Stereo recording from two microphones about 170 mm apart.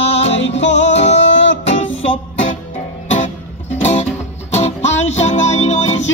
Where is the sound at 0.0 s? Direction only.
40° left (ahead or behind).